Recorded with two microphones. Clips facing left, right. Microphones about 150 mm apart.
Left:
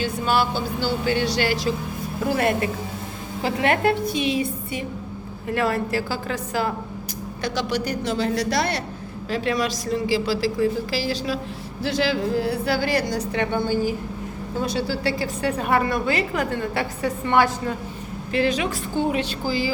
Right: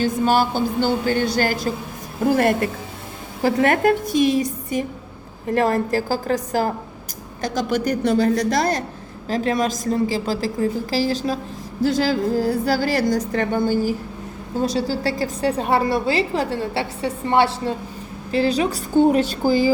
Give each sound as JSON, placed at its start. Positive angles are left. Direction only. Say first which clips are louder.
{"t": 0.0, "sound": "a woman's voice", "louder": "right 4 dB", "side_deg": -40}